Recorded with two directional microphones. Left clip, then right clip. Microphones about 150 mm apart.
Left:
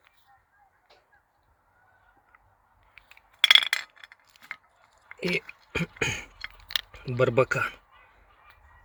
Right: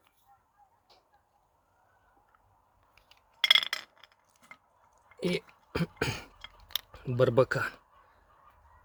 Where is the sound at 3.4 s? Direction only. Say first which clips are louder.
Left 5 dB; 25° right (ahead or behind).